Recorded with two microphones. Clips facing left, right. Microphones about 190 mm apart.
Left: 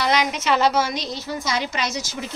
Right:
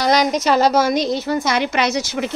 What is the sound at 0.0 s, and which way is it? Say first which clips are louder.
A woman's voice: right 5 dB; 40° right (ahead or behind).